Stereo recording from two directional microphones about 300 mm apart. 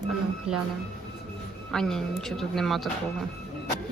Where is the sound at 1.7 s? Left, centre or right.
Centre.